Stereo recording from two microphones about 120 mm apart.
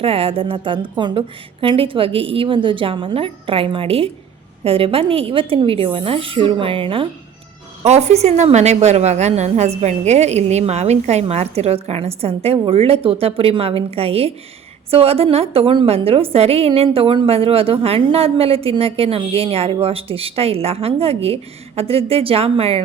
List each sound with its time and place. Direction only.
0.0 s a woman's voice: 55° right (ahead or behind)
7.9 s a woman's voice: 65° right (ahead or behind)